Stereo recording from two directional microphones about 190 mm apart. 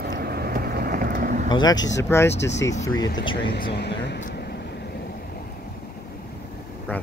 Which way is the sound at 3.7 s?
60° left (ahead or behind).